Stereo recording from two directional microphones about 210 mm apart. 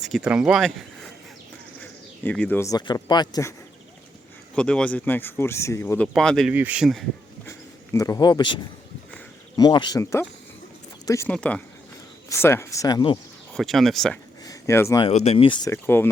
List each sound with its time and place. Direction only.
0.0 s speech: 5° right (ahead or behind); by 3.5 s 20° left (ahead or behind)
4.5 s speech: 5° left (ahead or behind)
7.9 s speech: 15° left (ahead or behind)
9.6 s speech: 20° left (ahead or behind)
13.5 s speech: centre (ahead or behind)
14.4 s a sound: 15° left (ahead or behind)
15.0 s speech: 30° left (ahead or behind); by 16.0 s 10° left (ahead or behind)